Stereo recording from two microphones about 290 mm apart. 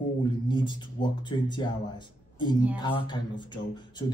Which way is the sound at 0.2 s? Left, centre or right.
Centre.